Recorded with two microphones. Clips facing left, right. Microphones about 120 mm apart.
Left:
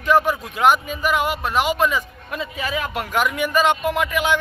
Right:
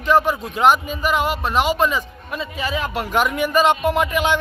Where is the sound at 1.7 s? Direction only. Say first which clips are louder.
Right 1 dB; 30° right (ahead or behind).